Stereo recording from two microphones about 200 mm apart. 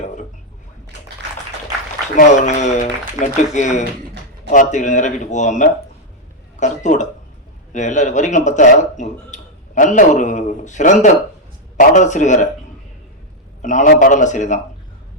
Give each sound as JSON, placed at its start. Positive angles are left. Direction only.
{"t": 2.1, "sound": "speech", "side_deg": 35}
{"t": 13.6, "sound": "speech", "side_deg": 40}